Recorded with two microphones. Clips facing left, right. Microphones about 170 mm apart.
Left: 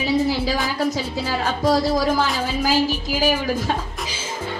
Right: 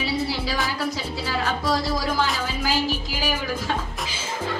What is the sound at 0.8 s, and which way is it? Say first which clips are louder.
A woman's voice: left 5 dB; 40° left (ahead or behind).